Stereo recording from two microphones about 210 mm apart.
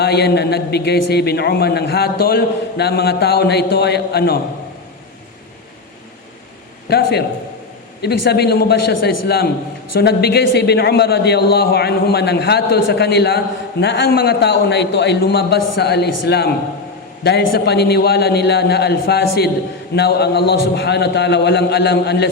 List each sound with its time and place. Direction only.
0.0 s a man's voice: 50° left (ahead or behind)
6.9 s a man's voice: 50° left (ahead or behind)